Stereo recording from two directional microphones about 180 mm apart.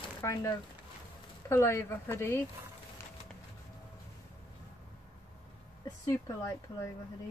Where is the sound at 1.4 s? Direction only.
15° left (ahead or behind).